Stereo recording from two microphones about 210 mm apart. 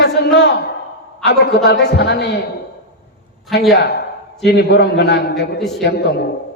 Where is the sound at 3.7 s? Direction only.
50° left (ahead or behind).